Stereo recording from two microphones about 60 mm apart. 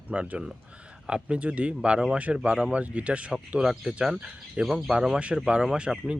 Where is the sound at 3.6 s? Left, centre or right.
Centre.